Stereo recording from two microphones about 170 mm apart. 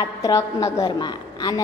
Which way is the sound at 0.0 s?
20° left (ahead or behind).